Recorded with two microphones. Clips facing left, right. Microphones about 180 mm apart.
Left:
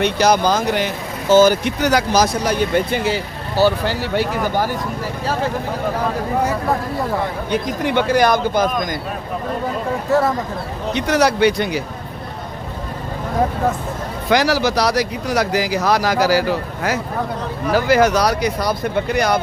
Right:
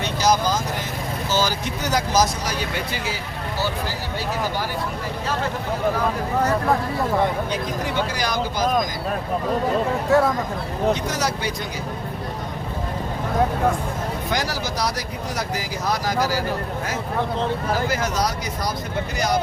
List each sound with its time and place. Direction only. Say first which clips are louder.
0.0 s speech: left 5 dB; 65° left (ahead or behind)
1.3 s speech: left 12 dB; 55° left (ahead or behind)
7.5 s speech: left 6 dB; 60° left (ahead or behind)
10.9 s speech: left 8 dB; 65° left (ahead or behind)
14.3 s speech: left 13 dB; 75° left (ahead or behind)
17.7 s speech: left 9 dB; 75° left (ahead or behind)